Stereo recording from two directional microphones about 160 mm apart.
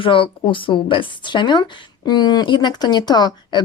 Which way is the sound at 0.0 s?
30° left (ahead or behind).